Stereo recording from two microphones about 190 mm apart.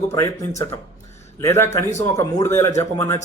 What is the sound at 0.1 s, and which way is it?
Speech, 15° left (ahead or behind).